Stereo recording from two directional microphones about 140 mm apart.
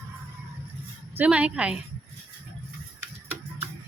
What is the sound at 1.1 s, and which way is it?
Speech, 10° right (ahead or behind).